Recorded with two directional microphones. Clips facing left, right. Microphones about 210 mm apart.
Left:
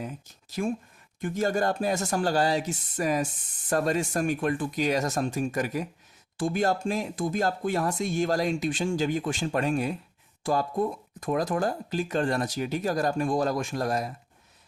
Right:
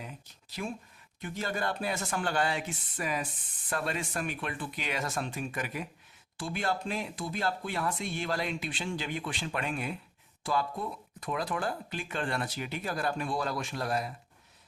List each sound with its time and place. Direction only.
0.0 s speech: 45° left (ahead or behind)